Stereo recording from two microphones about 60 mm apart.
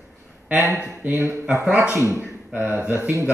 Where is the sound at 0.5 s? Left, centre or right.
Right.